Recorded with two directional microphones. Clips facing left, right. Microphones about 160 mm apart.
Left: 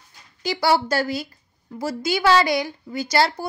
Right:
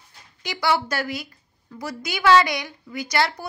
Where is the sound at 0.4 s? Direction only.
30° left (ahead or behind).